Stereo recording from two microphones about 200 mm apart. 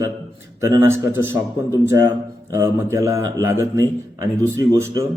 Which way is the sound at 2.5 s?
15° right (ahead or behind).